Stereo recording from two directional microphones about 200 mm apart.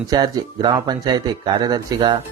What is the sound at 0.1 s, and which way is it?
Speech, 20° right (ahead or behind).